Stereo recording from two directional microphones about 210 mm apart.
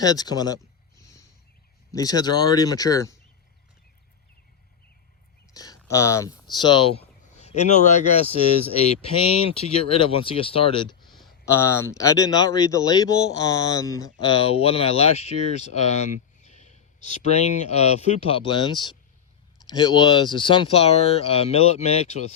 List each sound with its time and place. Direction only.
0.0 s a sound: 15° left (ahead or behind)
1.9 s speech: 15° left (ahead or behind)
5.5 s a man's voice: 15° left (ahead or behind); by 8.3 s 35° left (ahead or behind)
9.6 s a man's voice: 25° left (ahead or behind)
11.4 s a man's voice: 10° left (ahead or behind); by 22.2 s 30° left (ahead or behind)